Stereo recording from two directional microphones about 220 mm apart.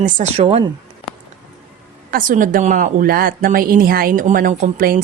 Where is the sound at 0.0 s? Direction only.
30° right (ahead or behind).